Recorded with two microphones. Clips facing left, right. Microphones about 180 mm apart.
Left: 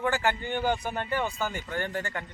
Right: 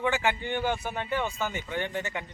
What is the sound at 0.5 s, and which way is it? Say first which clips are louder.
Speech: left 1 dB; 15° left (ahead or behind).